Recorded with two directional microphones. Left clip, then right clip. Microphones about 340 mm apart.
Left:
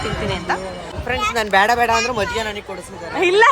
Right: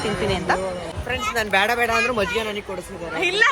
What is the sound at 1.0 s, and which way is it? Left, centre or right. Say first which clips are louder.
Speech: left 4 dB; left.